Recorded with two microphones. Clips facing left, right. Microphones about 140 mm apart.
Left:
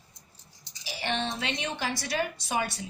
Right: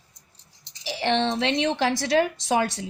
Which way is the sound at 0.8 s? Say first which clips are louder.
Right 8 dB; 90° right.